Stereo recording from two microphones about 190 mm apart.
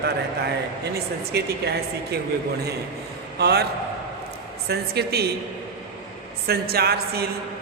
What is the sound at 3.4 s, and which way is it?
Speech, 55° right (ahead or behind).